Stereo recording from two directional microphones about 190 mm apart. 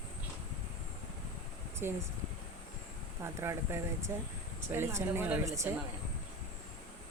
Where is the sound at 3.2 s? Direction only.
15° right (ahead or behind).